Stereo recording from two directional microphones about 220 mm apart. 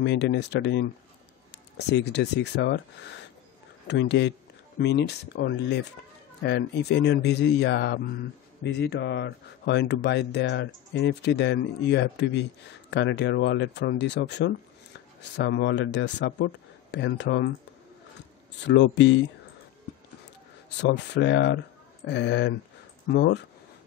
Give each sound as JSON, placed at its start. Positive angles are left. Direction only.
{"t": 0.0, "sound": "speech", "side_deg": 50}
{"t": 18.6, "sound": "speech", "side_deg": 55}
{"t": 20.7, "sound": "speech", "side_deg": 50}